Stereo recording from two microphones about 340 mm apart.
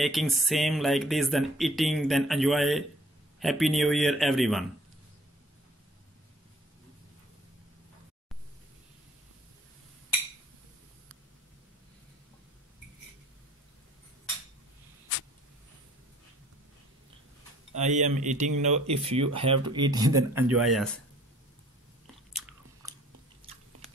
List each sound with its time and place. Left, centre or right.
0.0 s speech: centre
17.7 s speech: right; by 20.9 s centre
22.3 s chewing: centre